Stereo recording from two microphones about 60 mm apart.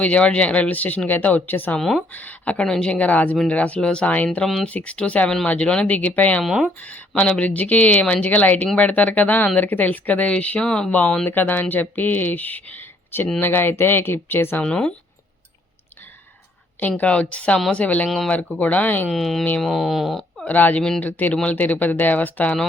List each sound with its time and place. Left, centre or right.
0.0 s speech: left
1.8 s speech: centre
2.1 s speech: left
2.6 s speech: centre
2.9 s speech: left
6.4 s speech: centre
7.2 s speech: centre
8.6 s speech: centre
8.9 s speech: left
11.3 s speech: left
14.6 s speech: centre
17.0 s speech: left
19.1 s speech: centre
20.4 s speech: left